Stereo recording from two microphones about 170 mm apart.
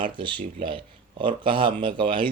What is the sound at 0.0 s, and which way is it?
Speech, 30° right (ahead or behind).